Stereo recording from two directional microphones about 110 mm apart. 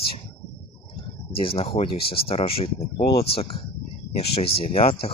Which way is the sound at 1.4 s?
60° left (ahead or behind).